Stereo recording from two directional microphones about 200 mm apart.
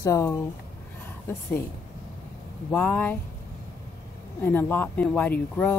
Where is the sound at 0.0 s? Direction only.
15° left (ahead or behind).